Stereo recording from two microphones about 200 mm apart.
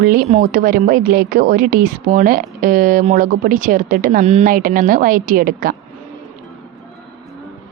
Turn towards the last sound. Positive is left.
turn(degrees=-45)  # may be behind; listen again after turning